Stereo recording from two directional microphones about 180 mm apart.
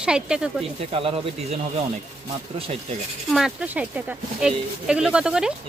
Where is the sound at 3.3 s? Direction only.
Centre (ahead or behind).